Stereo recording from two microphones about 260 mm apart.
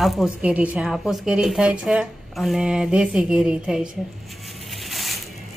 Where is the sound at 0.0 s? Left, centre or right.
Centre.